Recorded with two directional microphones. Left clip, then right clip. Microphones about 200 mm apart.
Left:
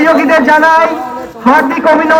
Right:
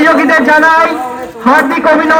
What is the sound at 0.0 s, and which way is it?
A man's voice, 25° left (ahead or behind).